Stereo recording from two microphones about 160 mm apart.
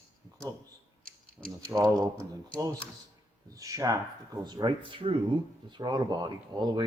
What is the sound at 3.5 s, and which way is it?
Speech, 20° right (ahead or behind).